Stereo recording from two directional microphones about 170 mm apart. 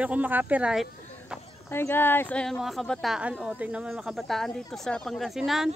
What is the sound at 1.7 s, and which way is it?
Speech, 15° left (ahead or behind).